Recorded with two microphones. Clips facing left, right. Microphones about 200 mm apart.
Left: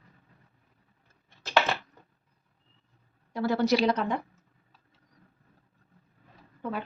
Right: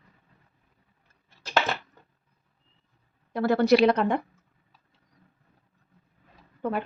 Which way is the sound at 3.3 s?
60° right (ahead or behind).